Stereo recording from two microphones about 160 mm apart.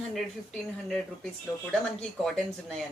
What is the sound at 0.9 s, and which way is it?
A woman's voice, 5° left (ahead or behind).